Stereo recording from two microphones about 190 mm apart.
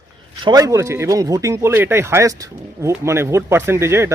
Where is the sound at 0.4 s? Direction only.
20° right (ahead or behind).